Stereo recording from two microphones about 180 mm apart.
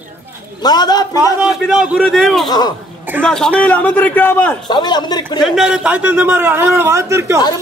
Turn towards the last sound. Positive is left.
turn(degrees=-15)  # may be behind; listen again after turning